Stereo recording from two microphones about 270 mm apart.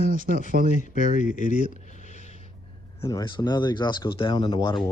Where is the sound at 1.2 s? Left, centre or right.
Left.